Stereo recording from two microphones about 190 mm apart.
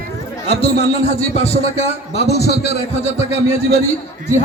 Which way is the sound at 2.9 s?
35° left (ahead or behind).